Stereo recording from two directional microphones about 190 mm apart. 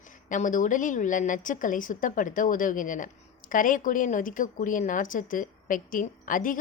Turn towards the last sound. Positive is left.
turn(degrees=45)  # may be behind; listen again after turning